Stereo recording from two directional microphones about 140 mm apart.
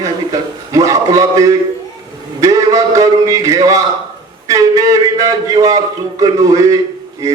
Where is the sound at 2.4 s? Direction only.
25° right (ahead or behind).